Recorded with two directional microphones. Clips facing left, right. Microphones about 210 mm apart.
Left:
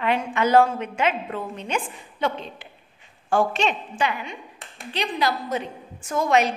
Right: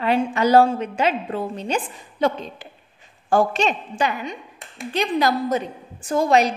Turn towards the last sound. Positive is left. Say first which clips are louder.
# right 3 dB
turn(degrees=-35)  # may be behind; listen again after turning